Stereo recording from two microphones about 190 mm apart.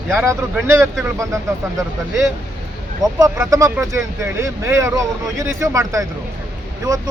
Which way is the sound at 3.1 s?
20° right (ahead or behind).